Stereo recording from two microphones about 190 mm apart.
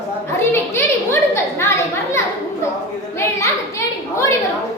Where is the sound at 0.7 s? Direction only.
15° left (ahead or behind).